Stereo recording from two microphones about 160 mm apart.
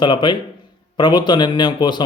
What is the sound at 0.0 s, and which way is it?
Speech, 30° left (ahead or behind).